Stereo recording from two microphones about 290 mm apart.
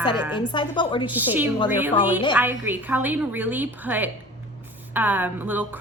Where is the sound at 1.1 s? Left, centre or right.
Centre.